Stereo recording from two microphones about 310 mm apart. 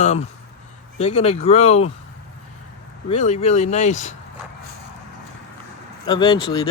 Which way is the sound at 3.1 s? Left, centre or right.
Left.